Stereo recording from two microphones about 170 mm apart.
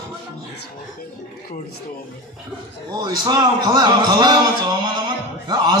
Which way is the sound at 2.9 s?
25° right (ahead or behind).